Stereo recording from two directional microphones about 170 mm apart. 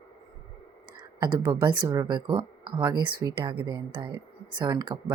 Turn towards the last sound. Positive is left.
turn(degrees=-25)  # may be behind; listen again after turning